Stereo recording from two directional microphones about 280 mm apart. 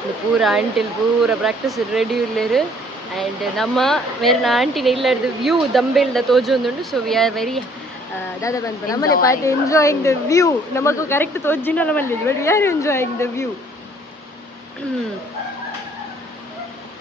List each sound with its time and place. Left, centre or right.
0.4 s speech: centre
8.4 s speech: centre
9.1 s a woman's voice: left
9.4 s speech: centre